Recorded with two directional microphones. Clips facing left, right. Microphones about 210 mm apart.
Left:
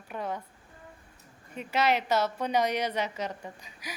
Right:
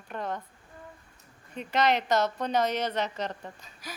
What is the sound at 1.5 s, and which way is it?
A woman's voice, 5° left (ahead or behind).